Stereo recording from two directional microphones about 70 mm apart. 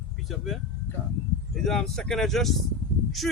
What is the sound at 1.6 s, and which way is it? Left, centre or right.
Speech, centre.